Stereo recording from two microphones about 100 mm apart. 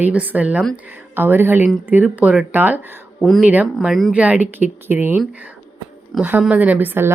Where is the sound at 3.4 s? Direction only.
15° right (ahead or behind).